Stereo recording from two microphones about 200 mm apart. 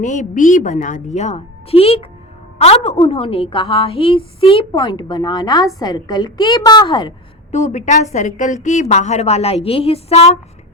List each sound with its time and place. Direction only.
0.0 s a woman's voice: 40° left (ahead or behind); by 7.1 s 20° left (ahead or behind)
7.5 s a woman's voice: 35° left (ahead or behind)